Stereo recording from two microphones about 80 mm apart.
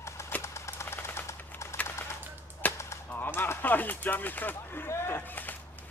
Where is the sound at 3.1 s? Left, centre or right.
Left.